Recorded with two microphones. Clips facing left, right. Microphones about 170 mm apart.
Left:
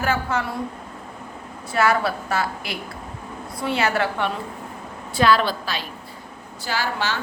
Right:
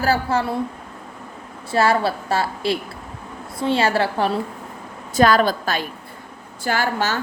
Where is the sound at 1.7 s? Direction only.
30° right (ahead or behind).